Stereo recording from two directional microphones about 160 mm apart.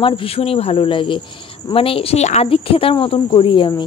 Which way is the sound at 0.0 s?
35° left (ahead or behind).